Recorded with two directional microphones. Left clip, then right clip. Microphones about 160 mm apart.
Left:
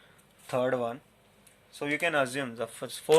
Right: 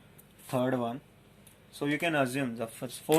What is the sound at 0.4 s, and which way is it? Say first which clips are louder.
Speech: left 2 dB; 30° left (ahead or behind).